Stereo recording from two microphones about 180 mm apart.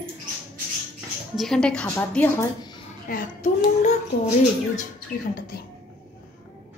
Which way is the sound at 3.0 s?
50° left (ahead or behind).